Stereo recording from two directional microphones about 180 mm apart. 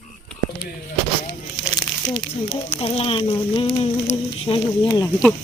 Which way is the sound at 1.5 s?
25° left (ahead or behind).